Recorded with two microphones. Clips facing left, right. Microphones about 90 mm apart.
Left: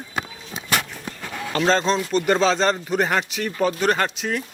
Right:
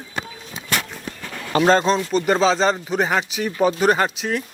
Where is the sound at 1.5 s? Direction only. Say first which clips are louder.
Right 4 dB; 10° right (ahead or behind).